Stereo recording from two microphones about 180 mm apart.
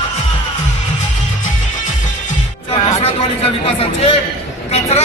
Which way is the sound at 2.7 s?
35° left (ahead or behind).